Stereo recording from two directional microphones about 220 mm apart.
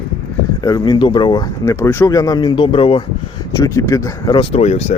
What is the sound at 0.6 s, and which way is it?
Speech, 15° left (ahead or behind).